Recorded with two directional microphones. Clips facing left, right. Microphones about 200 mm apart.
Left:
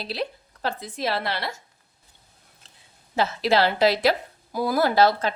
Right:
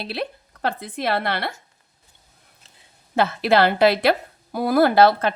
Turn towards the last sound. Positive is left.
turn(degrees=-60)  # may be behind; listen again after turning